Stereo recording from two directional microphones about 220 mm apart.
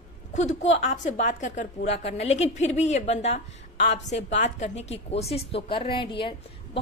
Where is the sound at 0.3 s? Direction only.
35° left (ahead or behind).